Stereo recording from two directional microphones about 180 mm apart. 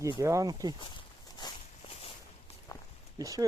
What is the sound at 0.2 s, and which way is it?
Speech, 15° right (ahead or behind).